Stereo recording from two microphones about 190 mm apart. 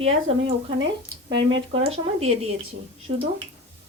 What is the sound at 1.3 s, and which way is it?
Speech, 75° right (ahead or behind).